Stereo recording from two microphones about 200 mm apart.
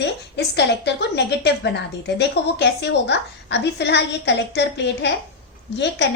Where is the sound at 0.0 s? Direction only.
60° left (ahead or behind).